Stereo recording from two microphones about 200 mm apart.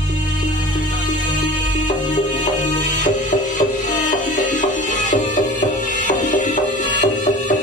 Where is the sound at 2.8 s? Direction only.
40° left (ahead or behind).